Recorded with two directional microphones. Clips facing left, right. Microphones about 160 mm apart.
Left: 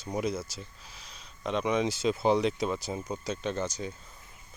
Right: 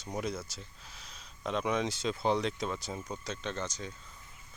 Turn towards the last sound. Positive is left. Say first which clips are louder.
# left 5 dB
turn(degrees=10)  # may be behind; listen again after turning